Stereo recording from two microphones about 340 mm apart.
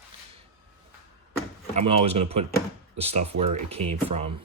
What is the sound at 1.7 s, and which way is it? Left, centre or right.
A man's voice, centre.